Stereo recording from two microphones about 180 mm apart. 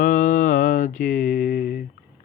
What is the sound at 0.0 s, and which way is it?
Mantra, 45° left (ahead or behind).